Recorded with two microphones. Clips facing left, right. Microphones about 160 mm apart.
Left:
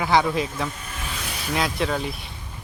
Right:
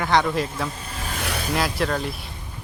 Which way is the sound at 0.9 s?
35° right (ahead or behind).